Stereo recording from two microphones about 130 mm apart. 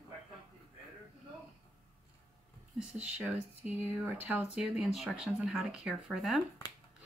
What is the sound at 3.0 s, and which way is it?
Speech, 10° right (ahead or behind).